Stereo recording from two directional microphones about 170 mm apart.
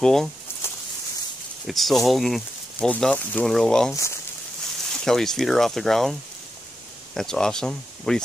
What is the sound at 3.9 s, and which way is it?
Speech, 15° left (ahead or behind).